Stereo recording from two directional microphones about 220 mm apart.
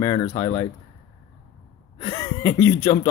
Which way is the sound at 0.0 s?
20° left (ahead or behind).